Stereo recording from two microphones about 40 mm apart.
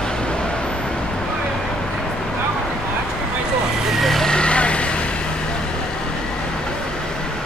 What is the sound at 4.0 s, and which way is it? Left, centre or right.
Vehicle, centre.